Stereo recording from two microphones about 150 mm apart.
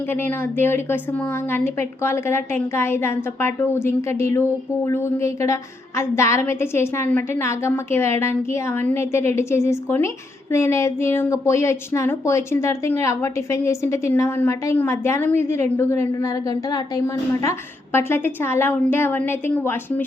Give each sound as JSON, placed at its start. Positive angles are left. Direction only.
{"t": 0.1, "sound": "a woman's voice", "side_deg": 15}
{"t": 17.9, "sound": "a woman's voice", "side_deg": 15}